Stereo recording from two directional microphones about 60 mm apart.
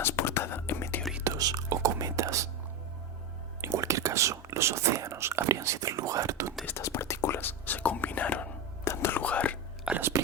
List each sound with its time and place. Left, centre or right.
0.0 s whispering: left
1.2 s whispering: right
3.6 s whispering: right
5.5 s whispering: right
6.7 s whispering: left
7.3 s whispering: left
8.8 s whispering: left
9.1 s whispering: left
9.9 s chewing: centre